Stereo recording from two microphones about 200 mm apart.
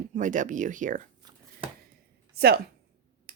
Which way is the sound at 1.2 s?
25° right (ahead or behind).